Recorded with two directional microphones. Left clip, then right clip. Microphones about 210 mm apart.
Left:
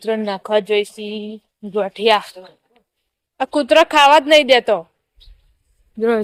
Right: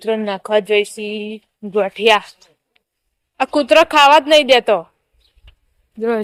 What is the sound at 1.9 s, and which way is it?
Speech, 5° right (ahead or behind).